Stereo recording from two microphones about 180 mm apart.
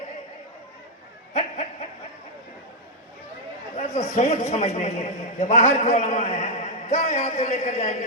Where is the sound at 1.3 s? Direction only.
40° left (ahead or behind).